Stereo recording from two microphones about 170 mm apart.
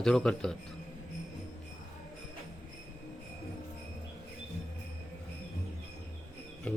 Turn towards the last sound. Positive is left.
turn(degrees=10)  # may be behind; listen again after turning